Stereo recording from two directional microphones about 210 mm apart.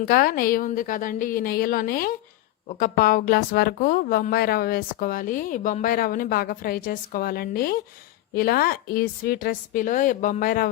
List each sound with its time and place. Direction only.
0.0 s a woman's voice: 45° left (ahead or behind)